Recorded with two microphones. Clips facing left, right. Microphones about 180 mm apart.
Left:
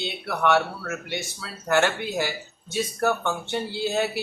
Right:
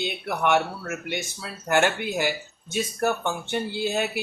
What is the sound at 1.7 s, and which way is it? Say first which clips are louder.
Speech: even; 15° right (ahead or behind).